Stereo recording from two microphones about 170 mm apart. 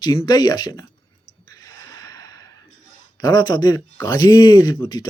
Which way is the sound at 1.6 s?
20° left (ahead or behind).